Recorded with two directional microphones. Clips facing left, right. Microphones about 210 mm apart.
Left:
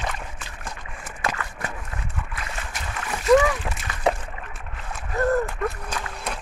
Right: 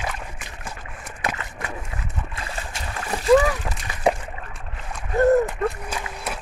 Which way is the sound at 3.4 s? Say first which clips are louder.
Even; centre (ahead or behind).